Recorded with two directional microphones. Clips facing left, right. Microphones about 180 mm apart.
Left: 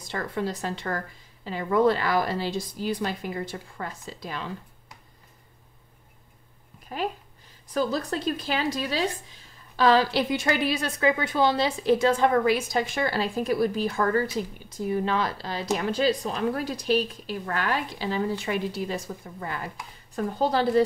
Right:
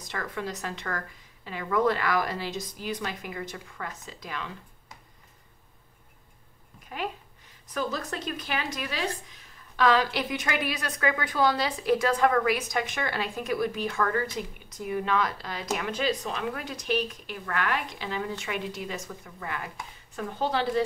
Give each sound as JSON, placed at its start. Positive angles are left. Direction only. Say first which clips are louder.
{"t": 0.0, "sound": "speech", "louder": "left 4 dB", "side_deg": 30}
{"t": 7.7, "sound": "speech", "louder": "left 5 dB", "side_deg": 35}